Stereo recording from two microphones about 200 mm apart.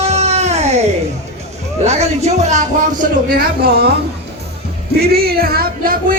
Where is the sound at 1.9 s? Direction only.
35° right (ahead or behind); by 3.9 s 50° right (ahead or behind).